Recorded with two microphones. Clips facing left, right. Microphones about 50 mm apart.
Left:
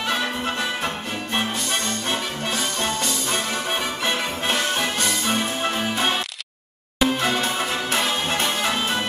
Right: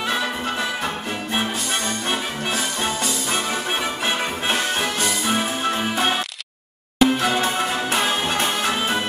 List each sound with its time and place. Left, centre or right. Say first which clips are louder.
0.1 s music: left 1 dB; centre
7.0 s music: right 3 dB; centre